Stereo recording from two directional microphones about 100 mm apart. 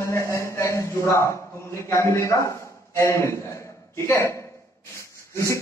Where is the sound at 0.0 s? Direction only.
30° left (ahead or behind).